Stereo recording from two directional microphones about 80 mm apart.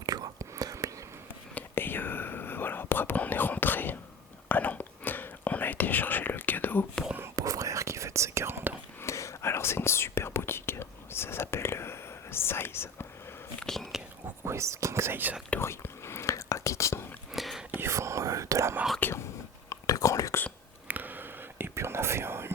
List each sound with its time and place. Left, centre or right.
0.0 s whispering: right
0.3 s whispering: right
1.5 s whispering: left
7.3 s whispering: right
9.0 s whispering: left
13.6 s whispering: centre
14.4 s whispering: right
15.6 s whispering: left
17.3 s whispering: centre
17.7 s whispering: right
18.9 s whispering: left
19.7 s whispering: left
20.8 s whispering: right